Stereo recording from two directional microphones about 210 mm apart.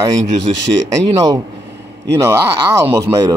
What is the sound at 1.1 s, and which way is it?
Speech, 15° right (ahead or behind).